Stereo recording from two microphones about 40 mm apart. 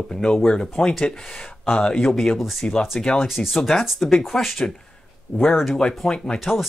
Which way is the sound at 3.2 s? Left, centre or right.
Centre.